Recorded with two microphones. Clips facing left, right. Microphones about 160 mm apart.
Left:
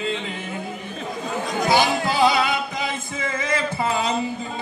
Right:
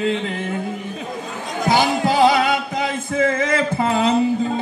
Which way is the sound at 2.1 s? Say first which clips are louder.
Right 4 dB; 55° right (ahead or behind).